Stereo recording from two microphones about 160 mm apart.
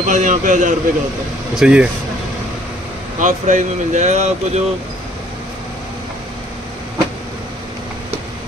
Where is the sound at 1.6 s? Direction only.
5° right (ahead or behind).